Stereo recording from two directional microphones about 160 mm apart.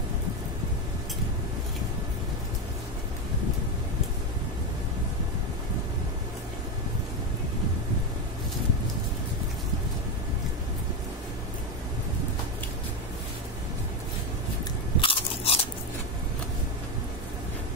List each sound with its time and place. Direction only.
15.0 s biting: 35° left (ahead or behind)